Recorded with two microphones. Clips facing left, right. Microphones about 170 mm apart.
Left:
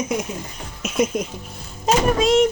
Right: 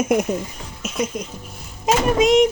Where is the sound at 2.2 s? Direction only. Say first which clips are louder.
Right 3 dB; 20° right (ahead or behind).